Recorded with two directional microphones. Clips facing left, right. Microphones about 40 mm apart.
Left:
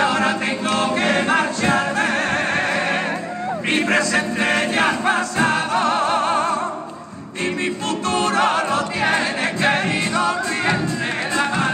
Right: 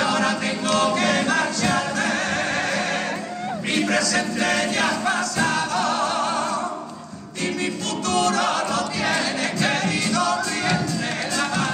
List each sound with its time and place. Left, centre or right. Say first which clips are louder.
0.0 s choir: left 3 dB; left
7.4 s music: left 3 dB; left